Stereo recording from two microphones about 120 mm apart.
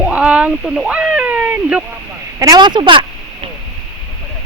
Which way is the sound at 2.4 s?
35° right (ahead or behind).